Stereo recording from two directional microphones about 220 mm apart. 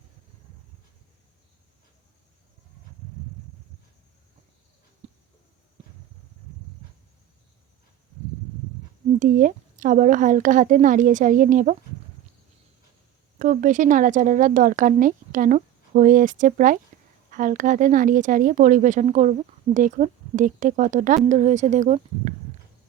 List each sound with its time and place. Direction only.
9.1 s speech: 35° right (ahead or behind)
13.4 s speech: 35° right (ahead or behind)